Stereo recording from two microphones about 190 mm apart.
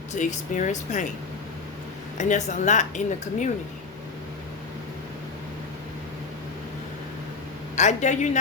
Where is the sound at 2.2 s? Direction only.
40° left (ahead or behind).